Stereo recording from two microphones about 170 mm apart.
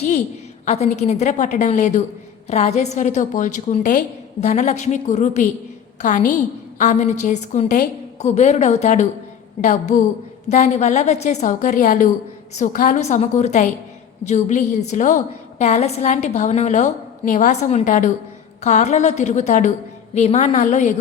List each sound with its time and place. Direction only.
0.6 s a woman's voice: 40° left (ahead or behind)